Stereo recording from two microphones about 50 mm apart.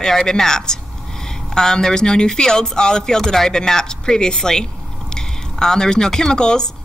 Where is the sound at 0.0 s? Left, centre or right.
Centre.